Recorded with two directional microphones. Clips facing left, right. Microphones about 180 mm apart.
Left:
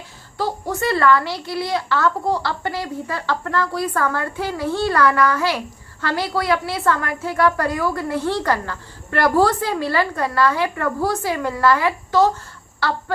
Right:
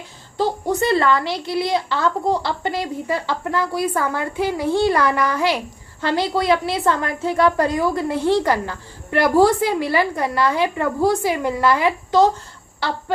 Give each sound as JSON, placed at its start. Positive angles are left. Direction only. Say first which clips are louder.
{"t": 0.3, "sound": "a woman's voice", "louder": "right 4 dB", "side_deg": -20}